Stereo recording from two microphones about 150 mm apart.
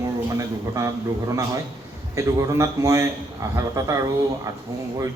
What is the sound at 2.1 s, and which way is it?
A man's voice, 20° right (ahead or behind).